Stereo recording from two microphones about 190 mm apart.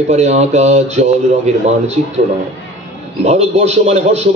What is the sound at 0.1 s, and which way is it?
Speech, 35° right (ahead or behind).